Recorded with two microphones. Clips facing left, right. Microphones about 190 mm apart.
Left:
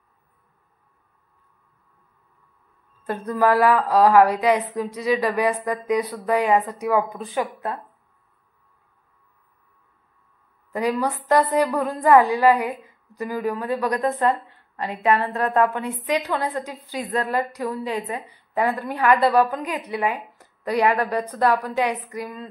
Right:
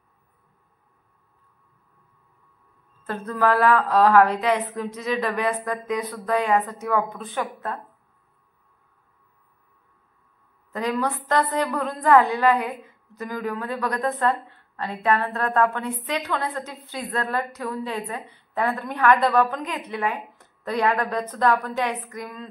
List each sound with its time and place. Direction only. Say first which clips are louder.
3.0 s a woman's voice: left 2 dB; 15° left (ahead or behind)
10.7 s a woman's voice: left 2 dB; 10° left (ahead or behind)